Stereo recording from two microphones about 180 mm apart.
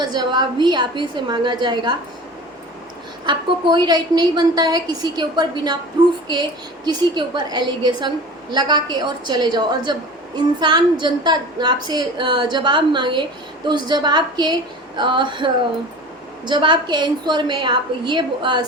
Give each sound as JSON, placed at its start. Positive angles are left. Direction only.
{"t": 0.0, "sound": "a woman's voice", "side_deg": -25}
{"t": 3.2, "sound": "a woman's voice", "side_deg": -25}
{"t": 16.5, "sound": "a woman's voice", "side_deg": -25}